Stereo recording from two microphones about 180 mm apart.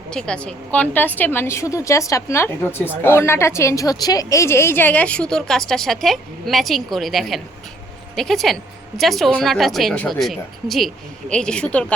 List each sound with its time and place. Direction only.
0.1 s a woman's voice: 5° left (ahead or behind)